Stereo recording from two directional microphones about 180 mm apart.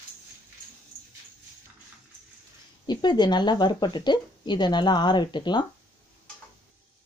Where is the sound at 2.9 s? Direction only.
25° left (ahead or behind).